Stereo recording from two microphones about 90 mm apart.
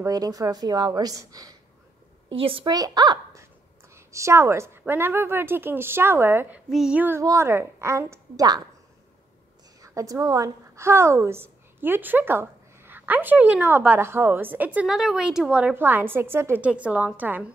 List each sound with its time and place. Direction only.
0.0 s a woman's voice: 40° right (ahead or behind)
2.3 s a woman's voice: 85° right
2.7 s a woman's voice: 50° right (ahead or behind)
3.9 s a woman's voice: 30° right (ahead or behind)
6.7 s child singing: 5° right (ahead or behind)
7.2 s a woman's voice: 35° right (ahead or behind)
8.4 s a woman's voice: 45° right (ahead or behind)
9.8 s a woman's voice: 40° right (ahead or behind); by 14.9 s 15° right (ahead or behind)
14.9 s a woman's voice: 5° right (ahead or behind)
15.7 s a woman's voice: 25° right (ahead or behind)
16.8 s a woman's voice: 15° right (ahead or behind)